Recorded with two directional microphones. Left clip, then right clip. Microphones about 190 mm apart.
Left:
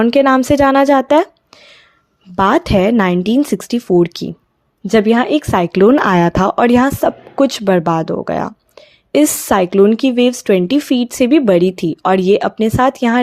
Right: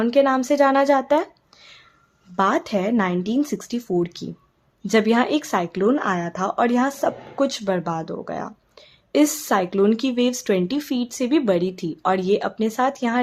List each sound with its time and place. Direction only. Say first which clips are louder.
0.0 s speech: left 7 dB; 35° left (ahead or behind)
4.9 s speech: left 6 dB; 25° left (ahead or behind)